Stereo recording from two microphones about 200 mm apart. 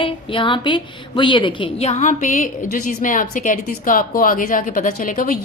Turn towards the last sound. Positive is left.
turn(degrees=45)  # may be behind; listen again after turning